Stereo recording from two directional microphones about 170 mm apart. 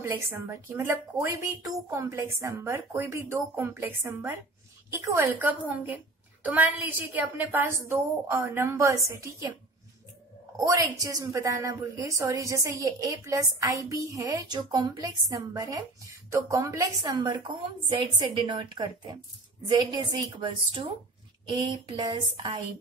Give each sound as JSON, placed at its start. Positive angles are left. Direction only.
{"t": 0.0, "sound": "speech", "side_deg": -15}
{"t": 10.6, "sound": "a woman's voice", "side_deg": -20}